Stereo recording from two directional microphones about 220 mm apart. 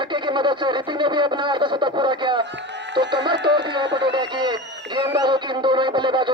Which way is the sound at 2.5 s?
55° right (ahead or behind).